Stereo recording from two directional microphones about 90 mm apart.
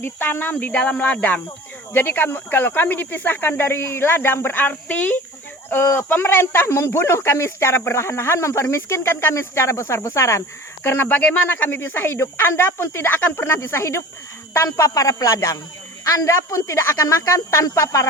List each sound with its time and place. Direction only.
0.0 s speech: 25° left (ahead or behind)